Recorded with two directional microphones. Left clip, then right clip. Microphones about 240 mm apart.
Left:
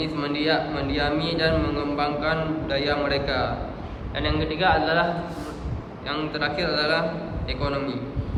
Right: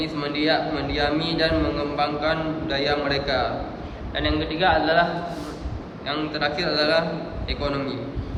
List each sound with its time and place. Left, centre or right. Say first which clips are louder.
0.0 s a man's voice: right 1 dB; centre
6.1 s a man's voice: right 1 dB; centre